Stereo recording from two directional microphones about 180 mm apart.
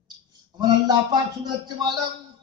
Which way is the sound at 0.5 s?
25° right (ahead or behind).